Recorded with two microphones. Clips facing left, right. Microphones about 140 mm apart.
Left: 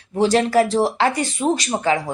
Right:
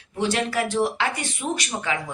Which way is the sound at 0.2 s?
35° left (ahead or behind).